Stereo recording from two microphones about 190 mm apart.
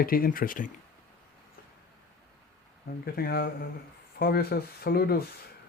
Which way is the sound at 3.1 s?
55° left (ahead or behind).